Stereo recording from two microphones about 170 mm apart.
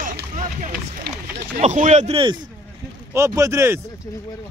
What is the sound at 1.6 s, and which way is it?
Speech, 45° right (ahead or behind).